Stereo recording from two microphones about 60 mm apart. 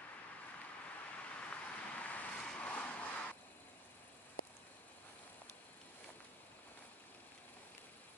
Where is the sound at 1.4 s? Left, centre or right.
Left.